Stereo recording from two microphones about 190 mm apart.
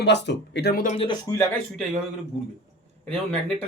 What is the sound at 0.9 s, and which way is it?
Speech, 25° left (ahead or behind).